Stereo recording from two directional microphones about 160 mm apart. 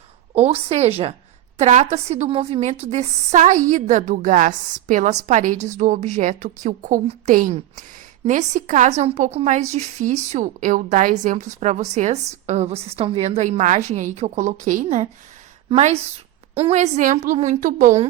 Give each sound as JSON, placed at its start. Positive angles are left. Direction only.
{"t": 0.3, "sound": "a woman's voice", "side_deg": -40}